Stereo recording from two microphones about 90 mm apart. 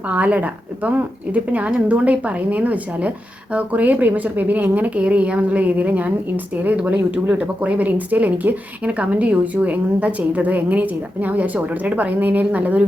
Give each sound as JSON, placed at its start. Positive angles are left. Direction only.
{"t": 0.1, "sound": "a woman's voice", "side_deg": -15}